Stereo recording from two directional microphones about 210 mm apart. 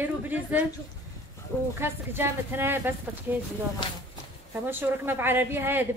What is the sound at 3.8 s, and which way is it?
Speech, 25° left (ahead or behind).